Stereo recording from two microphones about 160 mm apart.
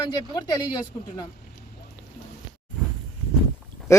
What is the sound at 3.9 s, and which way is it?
Speech, 20° left (ahead or behind).